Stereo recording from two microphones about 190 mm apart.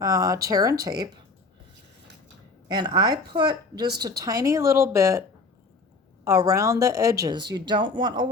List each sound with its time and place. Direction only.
0.0 s speech: 20° right (ahead or behind)
2.6 s speech: 20° right (ahead or behind)
6.2 s speech: 15° right (ahead or behind)